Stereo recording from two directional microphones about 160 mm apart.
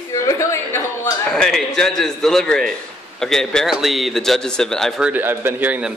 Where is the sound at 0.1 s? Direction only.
20° left (ahead or behind).